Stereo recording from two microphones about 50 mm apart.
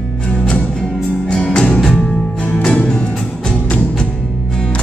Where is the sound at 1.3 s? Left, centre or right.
Centre.